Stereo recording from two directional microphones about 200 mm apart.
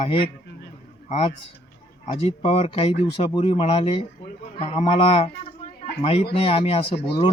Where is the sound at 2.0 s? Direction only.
30° left (ahead or behind).